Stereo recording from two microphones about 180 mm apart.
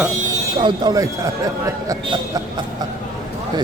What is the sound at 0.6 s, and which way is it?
Speech, 25° right (ahead or behind).